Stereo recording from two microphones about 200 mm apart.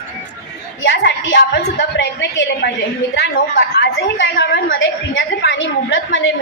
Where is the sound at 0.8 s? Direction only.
60° left (ahead or behind).